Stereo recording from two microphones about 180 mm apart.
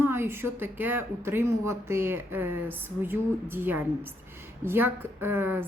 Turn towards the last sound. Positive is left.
turn(degrees=-10)  # may be behind; listen again after turning